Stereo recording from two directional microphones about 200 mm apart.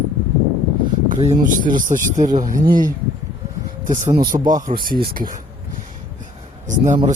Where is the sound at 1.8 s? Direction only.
40° right (ahead or behind).